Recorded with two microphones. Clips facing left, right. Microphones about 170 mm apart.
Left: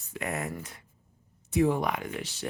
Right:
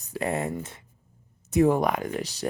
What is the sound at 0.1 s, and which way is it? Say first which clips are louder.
Speech: right 6 dB; 30° right (ahead or behind).